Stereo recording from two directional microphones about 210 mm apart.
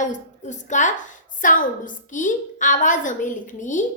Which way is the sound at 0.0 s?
35° left (ahead or behind).